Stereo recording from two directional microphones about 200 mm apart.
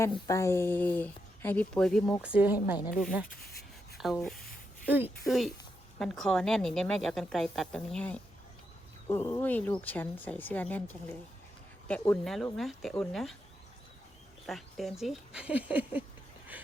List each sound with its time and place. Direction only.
0.3 s speech: 15° left (ahead or behind)
2.2 s speech: 5° right (ahead or behind)
3.9 s a sound: centre (ahead or behind)
5.2 s a woman's voice: centre (ahead or behind)
14.4 s a woman's voice: centre (ahead or behind)